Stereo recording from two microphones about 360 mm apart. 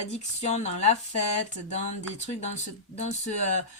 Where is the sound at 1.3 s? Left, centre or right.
Centre.